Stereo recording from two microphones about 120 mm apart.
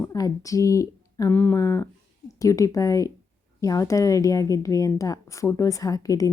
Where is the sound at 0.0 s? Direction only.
30° left (ahead or behind).